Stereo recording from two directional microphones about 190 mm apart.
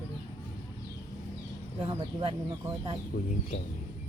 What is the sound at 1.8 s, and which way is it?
Speech, 30° right (ahead or behind).